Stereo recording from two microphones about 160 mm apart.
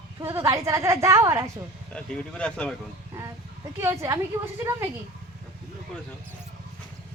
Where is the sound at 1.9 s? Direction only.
5° left (ahead or behind).